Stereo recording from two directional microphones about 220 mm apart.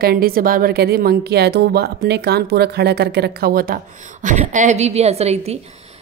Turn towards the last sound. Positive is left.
turn(degrees=-30)  # may be behind; listen again after turning